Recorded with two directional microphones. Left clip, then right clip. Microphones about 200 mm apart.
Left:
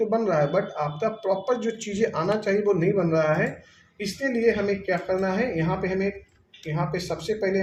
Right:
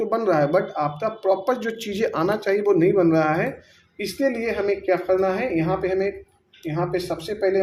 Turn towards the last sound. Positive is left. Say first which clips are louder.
# right 3 dB
turn(degrees=-35)  # may be behind; listen again after turning